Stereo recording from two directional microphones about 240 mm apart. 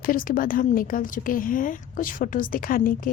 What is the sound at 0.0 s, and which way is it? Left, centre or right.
A woman's voice, left.